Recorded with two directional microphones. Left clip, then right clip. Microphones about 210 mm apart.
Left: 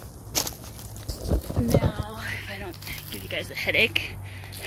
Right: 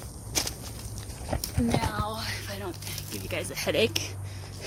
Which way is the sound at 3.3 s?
15° right (ahead or behind).